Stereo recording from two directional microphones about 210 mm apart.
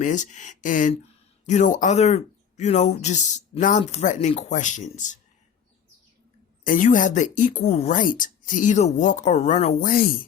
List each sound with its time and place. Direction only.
0.0 s speech: 35° left (ahead or behind)
6.7 s speech: 40° left (ahead or behind)